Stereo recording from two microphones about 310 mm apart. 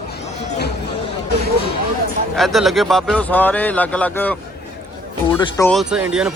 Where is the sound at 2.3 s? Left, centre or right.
Centre.